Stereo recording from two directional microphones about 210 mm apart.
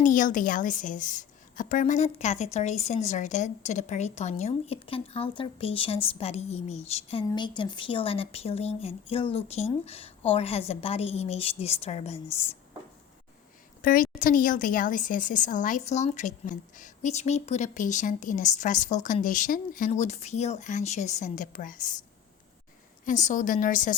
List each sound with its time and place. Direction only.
0.0 s a woman's voice: 40° left (ahead or behind)
13.8 s speech: 40° left (ahead or behind)
23.0 s speech: 35° left (ahead or behind)